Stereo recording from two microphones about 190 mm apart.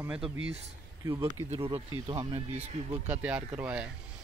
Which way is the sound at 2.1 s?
15° right (ahead or behind).